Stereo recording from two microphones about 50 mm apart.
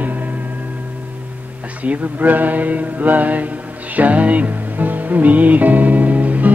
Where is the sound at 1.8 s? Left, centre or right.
Right.